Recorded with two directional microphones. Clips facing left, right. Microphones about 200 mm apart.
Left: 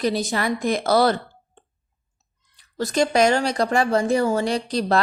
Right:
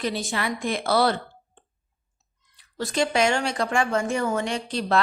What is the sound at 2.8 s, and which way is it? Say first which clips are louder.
Speech: left 4 dB; 40° left (ahead or behind).